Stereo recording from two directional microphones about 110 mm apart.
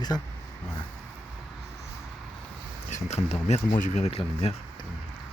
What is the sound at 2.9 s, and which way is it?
Speech, 90° left.